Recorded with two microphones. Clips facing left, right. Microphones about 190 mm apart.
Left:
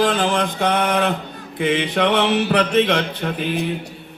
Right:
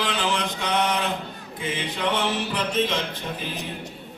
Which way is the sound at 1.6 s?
70° left (ahead or behind).